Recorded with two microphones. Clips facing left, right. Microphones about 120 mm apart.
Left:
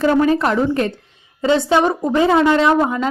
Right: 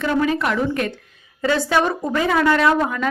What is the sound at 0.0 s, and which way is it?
A woman's voice, 35° left (ahead or behind).